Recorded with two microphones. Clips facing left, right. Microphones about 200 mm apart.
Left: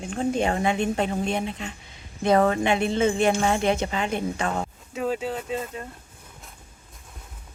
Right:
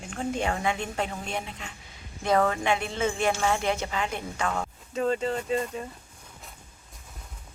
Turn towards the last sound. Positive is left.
turn(degrees=0)  # may be behind; listen again after turning